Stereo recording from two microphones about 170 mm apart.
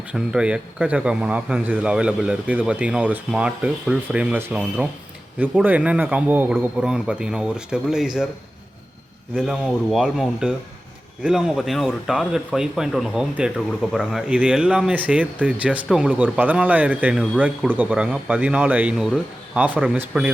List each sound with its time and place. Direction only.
0.1 s speech: 5° right (ahead or behind)
9.3 s speech: centre (ahead or behind)